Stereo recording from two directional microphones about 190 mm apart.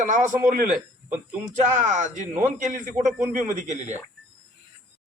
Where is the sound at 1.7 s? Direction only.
40° right (ahead or behind).